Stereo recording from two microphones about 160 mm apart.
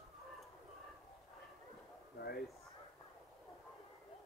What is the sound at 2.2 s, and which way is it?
Speech, 85° left.